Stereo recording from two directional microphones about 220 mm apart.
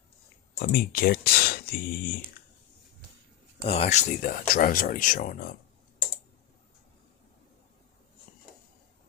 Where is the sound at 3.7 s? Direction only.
30° left (ahead or behind).